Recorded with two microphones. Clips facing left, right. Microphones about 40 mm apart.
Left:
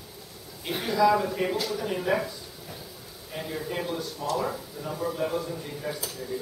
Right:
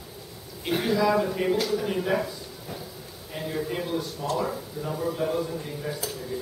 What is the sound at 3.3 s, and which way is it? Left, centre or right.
Speech, centre.